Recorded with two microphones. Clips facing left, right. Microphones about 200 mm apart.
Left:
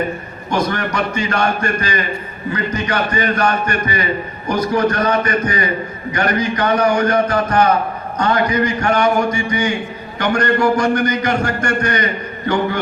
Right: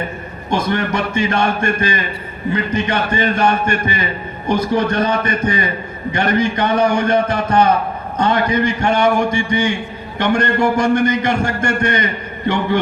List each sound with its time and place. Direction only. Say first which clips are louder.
0.5 s a man's voice: right 1 dB; 25° right (ahead or behind)